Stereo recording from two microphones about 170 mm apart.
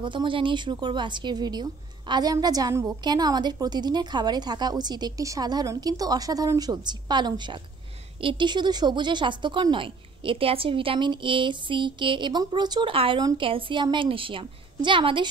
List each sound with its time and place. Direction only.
0.0 s a woman's voice: 30° right (ahead or behind)